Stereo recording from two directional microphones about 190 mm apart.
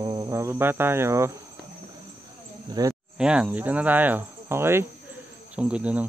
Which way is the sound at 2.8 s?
20° right (ahead or behind).